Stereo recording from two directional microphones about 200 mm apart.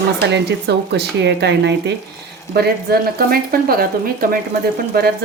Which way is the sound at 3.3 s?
45° right (ahead or behind).